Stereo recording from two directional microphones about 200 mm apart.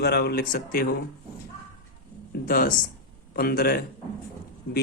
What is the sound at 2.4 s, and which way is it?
A man's voice, 45° left (ahead or behind).